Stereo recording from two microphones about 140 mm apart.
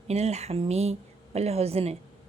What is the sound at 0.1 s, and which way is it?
A woman's voice, 50° right (ahead or behind).